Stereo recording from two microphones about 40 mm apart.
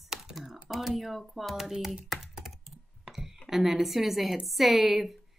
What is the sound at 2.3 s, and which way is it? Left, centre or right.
Computer keyboard, centre.